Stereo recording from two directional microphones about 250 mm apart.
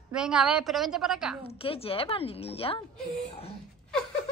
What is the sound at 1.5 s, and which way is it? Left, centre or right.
A woman's voice, left.